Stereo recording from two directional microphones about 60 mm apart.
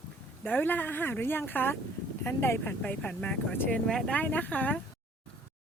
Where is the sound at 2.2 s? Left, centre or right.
Left.